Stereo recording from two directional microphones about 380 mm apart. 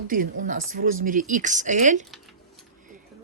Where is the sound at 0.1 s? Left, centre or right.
Right.